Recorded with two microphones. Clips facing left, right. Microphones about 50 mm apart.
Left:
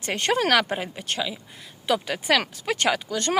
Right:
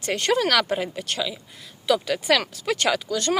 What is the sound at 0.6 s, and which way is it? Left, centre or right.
Speech, centre.